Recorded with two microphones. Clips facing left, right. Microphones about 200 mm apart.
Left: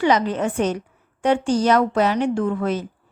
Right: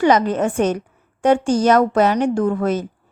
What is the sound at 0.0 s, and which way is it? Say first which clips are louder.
A woman's voice: right 3 dB; 45° right (ahead or behind).